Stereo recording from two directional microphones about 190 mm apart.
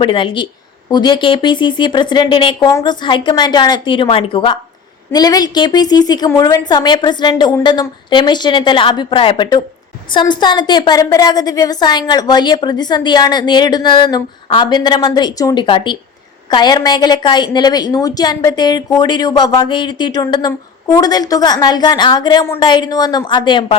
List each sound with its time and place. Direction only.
0.0 s a woman's voice: 25° left (ahead or behind)